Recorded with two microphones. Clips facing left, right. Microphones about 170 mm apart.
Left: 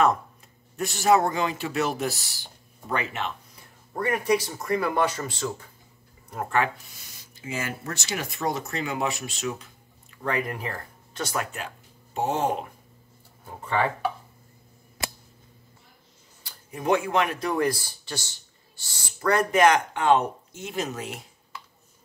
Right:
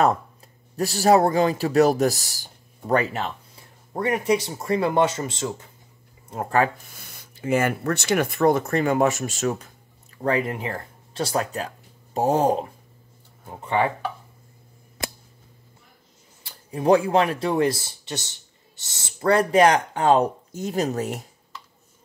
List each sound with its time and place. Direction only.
0.7 s speech: 35° right (ahead or behind)
3.9 s speech: 25° right (ahead or behind)
6.3 s speech: 35° right (ahead or behind)
10.1 s speech: 35° right (ahead or behind)
16.4 s speech: 30° right (ahead or behind)